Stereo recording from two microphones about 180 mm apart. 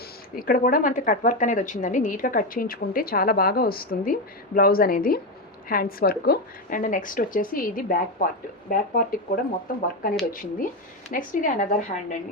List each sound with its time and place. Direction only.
0.3 s speech: 55° left (ahead or behind)